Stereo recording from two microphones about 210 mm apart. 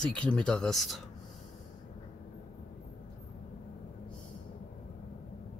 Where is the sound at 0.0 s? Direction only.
5° left (ahead or behind).